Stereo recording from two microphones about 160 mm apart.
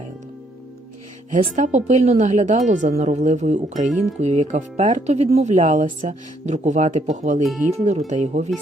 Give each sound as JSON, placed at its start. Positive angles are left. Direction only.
{"t": 1.5, "sound": "speech", "side_deg": -50}